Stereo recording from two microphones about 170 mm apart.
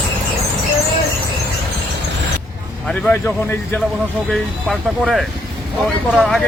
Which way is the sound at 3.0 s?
5° left (ahead or behind).